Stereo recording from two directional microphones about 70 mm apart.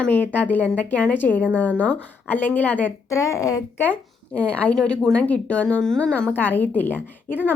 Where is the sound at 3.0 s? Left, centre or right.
Left.